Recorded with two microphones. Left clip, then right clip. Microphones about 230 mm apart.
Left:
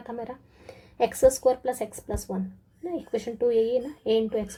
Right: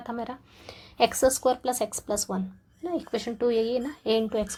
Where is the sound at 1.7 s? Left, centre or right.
Right.